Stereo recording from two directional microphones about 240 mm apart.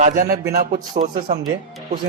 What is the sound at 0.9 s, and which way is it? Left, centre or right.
Speech, right.